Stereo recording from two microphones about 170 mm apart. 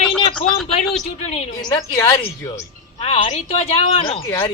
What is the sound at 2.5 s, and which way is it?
Speech, 35° left (ahead or behind).